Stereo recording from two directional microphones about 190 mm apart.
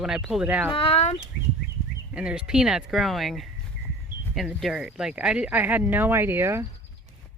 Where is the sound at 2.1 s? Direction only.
5° right (ahead or behind).